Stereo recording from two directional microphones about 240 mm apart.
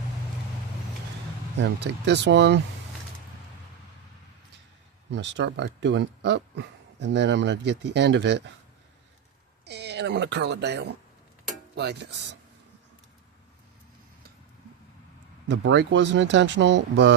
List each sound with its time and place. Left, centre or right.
1.5 s speech: right
5.1 s speech: right
9.6 s speech: right
15.4 s speech: right